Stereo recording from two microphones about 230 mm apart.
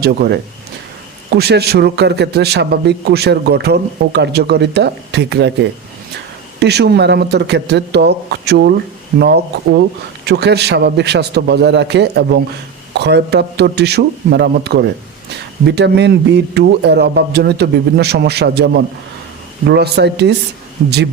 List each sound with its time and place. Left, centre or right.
0.0 s a man's voice: right
6.6 s a man's voice: right